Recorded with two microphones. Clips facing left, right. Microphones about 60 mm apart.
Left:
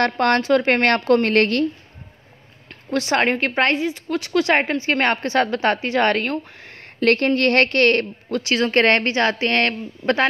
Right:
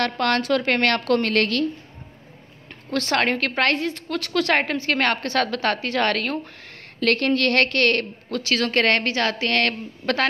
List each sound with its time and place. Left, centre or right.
0.0 s a woman's voice: left
2.9 s a woman's voice: centre
8.4 s a woman's voice: centre
8.7 s a woman's voice: left